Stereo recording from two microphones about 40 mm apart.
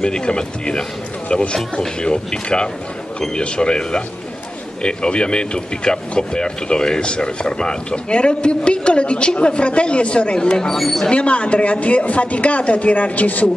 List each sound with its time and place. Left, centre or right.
0.0 s speech: centre
10.8 s speech: centre
11.1 s speech: left